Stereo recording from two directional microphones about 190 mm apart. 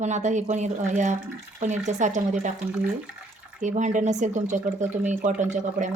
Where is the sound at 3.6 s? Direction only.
40° right (ahead or behind).